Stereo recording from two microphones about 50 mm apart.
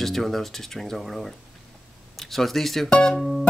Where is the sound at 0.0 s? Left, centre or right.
Centre.